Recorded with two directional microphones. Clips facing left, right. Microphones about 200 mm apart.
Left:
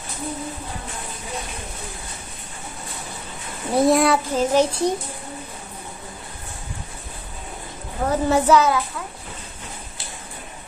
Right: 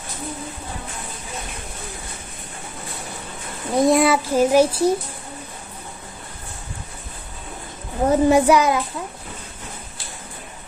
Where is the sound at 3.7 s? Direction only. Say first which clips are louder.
Right 1 dB; centre (ahead or behind).